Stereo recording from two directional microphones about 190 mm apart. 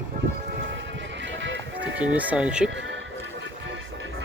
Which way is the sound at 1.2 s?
70° right (ahead or behind).